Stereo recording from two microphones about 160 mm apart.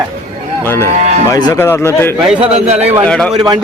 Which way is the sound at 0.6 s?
15° left (ahead or behind).